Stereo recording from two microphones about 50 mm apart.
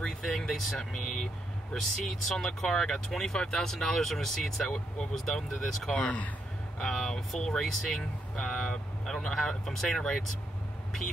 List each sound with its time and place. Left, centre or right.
0.0 s speech: centre
4.6 s speech: centre
5.1 s speech: centre
5.9 s speech: left
6.8 s speech: centre